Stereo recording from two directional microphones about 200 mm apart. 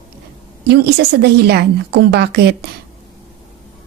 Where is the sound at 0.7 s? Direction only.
55° right (ahead or behind).